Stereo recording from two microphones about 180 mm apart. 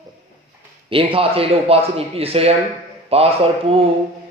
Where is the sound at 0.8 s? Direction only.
30° right (ahead or behind).